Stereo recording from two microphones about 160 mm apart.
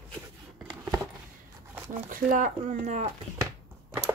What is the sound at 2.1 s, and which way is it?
Speech, 55° right (ahead or behind).